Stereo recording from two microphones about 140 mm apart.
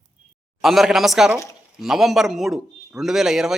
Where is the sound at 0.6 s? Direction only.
Centre (ahead or behind).